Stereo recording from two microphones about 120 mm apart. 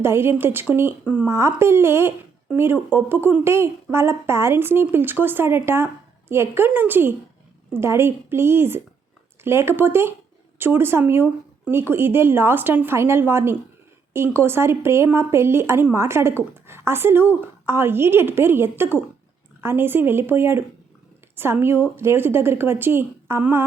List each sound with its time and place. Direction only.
0.0 s speech: 20° right (ahead or behind)